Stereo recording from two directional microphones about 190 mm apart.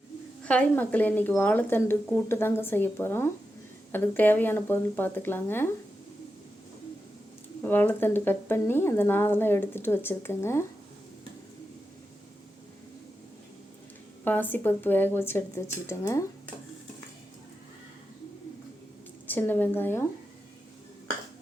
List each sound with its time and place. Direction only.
0.4 s speech: 5° left (ahead or behind)
7.6 s speech: 10° left (ahead or behind)
14.3 s speech: 10° left (ahead or behind)
19.3 s speech: 10° left (ahead or behind)